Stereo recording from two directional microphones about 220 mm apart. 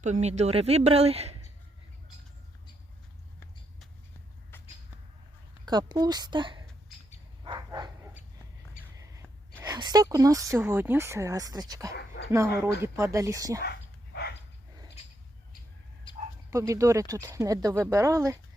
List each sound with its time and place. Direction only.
0.0 s speech: 30° right (ahead or behind)
5.6 s speech: 20° right (ahead or behind)
7.4 s bow-wow: 20° right (ahead or behind)
8.8 s a sound: 40° left (ahead or behind)
9.6 s speech: 20° right (ahead or behind)
11.9 s speech: 50° left (ahead or behind)
12.3 s speech: 15° right (ahead or behind)
13.7 s dog: 45° left (ahead or behind)
16.5 s speech: 15° right (ahead or behind)